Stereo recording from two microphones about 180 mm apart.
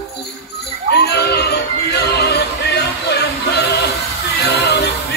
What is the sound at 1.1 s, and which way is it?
Music, 65° left (ahead or behind).